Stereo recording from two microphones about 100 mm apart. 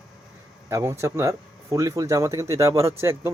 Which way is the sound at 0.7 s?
30° right (ahead or behind).